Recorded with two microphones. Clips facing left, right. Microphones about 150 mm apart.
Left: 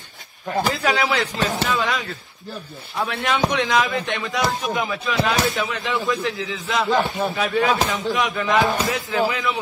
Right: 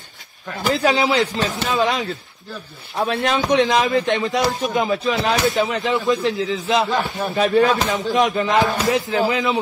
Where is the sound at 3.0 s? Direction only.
30° right (ahead or behind).